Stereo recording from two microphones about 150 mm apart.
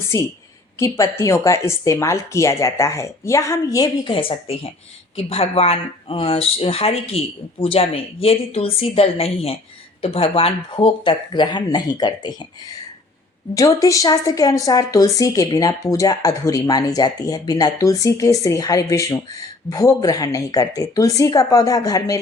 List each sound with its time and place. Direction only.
0.1 s a woman's voice: 20° left (ahead or behind)
4.1 s speech: 35° left (ahead or behind)
13.6 s a woman's voice: 20° left (ahead or behind)